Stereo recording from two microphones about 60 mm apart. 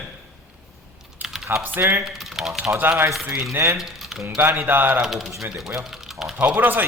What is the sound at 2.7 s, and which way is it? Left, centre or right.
Speech, right.